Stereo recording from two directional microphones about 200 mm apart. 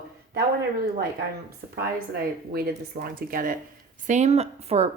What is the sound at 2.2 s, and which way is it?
Speech, 50° right (ahead or behind).